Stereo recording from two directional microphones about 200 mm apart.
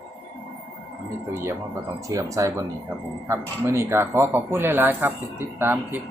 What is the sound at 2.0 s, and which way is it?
Speech, 15° right (ahead or behind).